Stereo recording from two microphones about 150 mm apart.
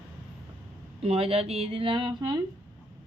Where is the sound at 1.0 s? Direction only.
40° right (ahead or behind).